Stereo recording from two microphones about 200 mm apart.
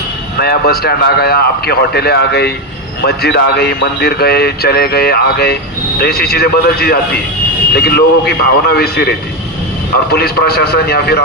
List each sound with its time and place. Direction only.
0.3 s speech: 50° left (ahead or behind)